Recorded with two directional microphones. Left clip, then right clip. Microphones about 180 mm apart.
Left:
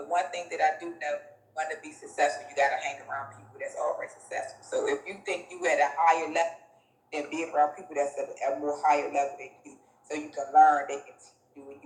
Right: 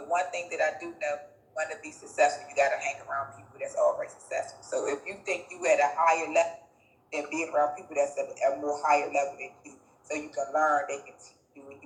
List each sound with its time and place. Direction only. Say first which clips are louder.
0.1 s speech: even; 20° left (ahead or behind)